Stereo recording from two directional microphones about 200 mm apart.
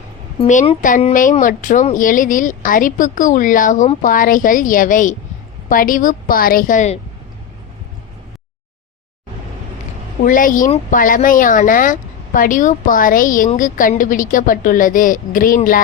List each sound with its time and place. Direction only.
0.3 s a woman's voice: 35° left (ahead or behind)
10.2 s speech: 40° left (ahead or behind)